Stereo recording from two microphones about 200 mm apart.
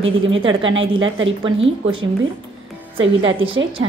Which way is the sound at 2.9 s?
25° right (ahead or behind).